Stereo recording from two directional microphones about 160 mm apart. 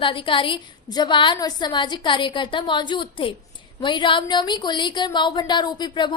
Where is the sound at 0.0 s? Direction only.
30° left (ahead or behind).